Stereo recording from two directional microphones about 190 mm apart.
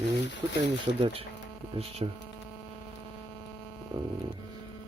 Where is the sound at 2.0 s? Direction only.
30° right (ahead or behind).